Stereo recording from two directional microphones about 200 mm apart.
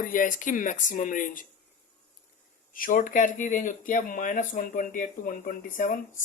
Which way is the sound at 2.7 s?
45° left (ahead or behind).